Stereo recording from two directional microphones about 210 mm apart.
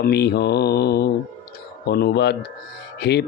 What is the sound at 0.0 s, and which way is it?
Speech, 50° left (ahead or behind).